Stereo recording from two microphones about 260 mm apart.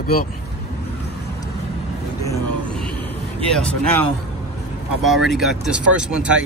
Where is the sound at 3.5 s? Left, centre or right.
Centre.